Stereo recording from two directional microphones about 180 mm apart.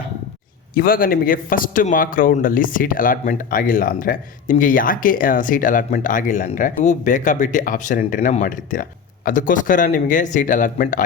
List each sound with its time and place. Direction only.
0.7 s speech: 55° left (ahead or behind)